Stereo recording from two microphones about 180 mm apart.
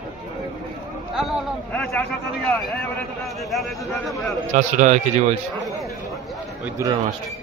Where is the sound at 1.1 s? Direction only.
Centre (ahead or behind).